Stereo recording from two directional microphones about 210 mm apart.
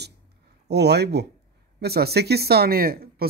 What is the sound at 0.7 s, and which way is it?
Speech, 50° right (ahead or behind).